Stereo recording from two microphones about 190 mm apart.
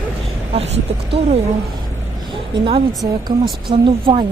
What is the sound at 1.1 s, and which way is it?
Speech, 30° right (ahead or behind).